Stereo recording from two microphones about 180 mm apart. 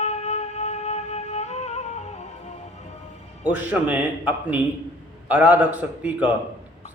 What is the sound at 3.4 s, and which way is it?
Speech, 10° right (ahead or behind).